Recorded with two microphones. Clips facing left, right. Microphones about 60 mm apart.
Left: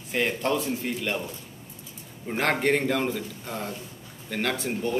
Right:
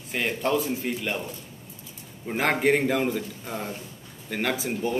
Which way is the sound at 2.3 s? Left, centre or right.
Centre.